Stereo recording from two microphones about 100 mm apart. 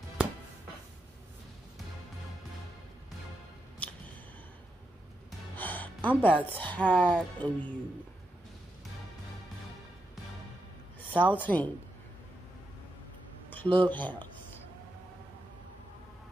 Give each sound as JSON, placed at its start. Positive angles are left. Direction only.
{"t": 5.6, "sound": "music", "side_deg": 15}
{"t": 6.0, "sound": "speech", "side_deg": 15}
{"t": 11.1, "sound": "speech", "side_deg": 15}
{"t": 13.5, "sound": "a sound", "side_deg": 20}